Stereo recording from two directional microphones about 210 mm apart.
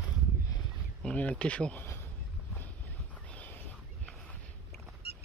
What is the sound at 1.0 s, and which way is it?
Speech, 5° left (ahead or behind).